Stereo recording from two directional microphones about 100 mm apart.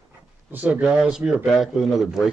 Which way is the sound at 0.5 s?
15° right (ahead or behind).